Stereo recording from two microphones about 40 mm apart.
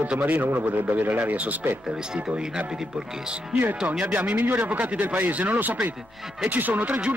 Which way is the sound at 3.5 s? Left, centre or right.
Right.